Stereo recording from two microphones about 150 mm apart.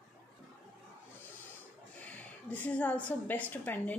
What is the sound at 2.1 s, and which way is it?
A woman's voice, 10° left (ahead or behind).